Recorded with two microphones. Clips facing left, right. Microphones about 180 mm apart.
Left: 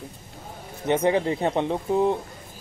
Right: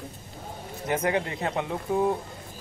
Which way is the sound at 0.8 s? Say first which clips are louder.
Left 5 dB; 30° left (ahead or behind).